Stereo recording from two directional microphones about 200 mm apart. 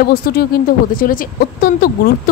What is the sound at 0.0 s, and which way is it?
Speech, 50° left (ahead or behind).